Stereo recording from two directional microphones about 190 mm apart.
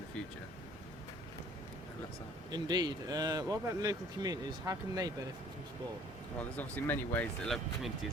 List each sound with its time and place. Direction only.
2.5 s speech: 20° right (ahead or behind)
6.6 s speech: 10° left (ahead or behind)